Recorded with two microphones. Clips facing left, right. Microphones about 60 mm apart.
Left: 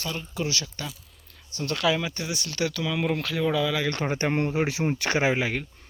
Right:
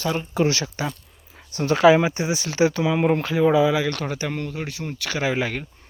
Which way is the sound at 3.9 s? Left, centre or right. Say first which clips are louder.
Even; left.